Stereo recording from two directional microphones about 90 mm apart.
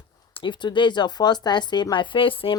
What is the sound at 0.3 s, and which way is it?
Speech, 60° left (ahead or behind).